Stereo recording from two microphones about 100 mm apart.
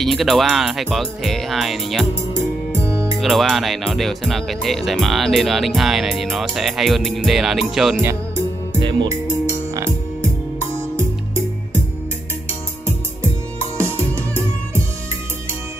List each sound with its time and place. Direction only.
0.0 s speech: centre (ahead or behind)
2.8 s music: 30° right (ahead or behind)
3.2 s speech: centre (ahead or behind)
8.0 s music: 30° right (ahead or behind)
9.5 s music: 30° right (ahead or behind)
13.7 s music: 20° left (ahead or behind)